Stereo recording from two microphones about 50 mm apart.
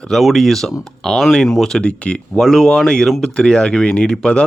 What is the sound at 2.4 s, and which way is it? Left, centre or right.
Speech, centre.